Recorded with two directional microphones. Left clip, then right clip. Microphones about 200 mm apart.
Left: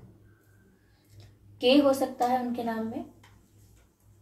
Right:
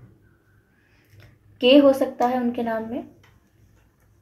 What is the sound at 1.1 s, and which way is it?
Speech, 40° right (ahead or behind).